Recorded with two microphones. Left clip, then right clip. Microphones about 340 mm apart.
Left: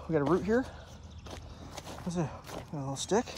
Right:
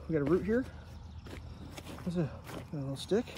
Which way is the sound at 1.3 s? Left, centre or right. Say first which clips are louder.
Left 4 dB; centre.